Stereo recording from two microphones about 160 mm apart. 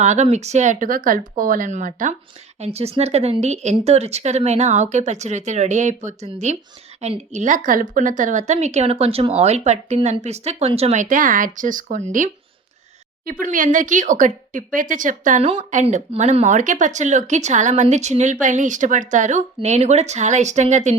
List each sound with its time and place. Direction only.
0.0 s speech: 45° right (ahead or behind)
2.6 s speech: 40° right (ahead or behind)
13.4 s speech: 55° right (ahead or behind)